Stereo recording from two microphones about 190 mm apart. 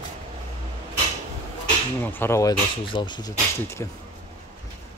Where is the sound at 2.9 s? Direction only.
25° left (ahead or behind).